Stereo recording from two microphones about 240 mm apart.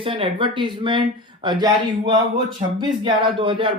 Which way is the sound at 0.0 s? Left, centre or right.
Right.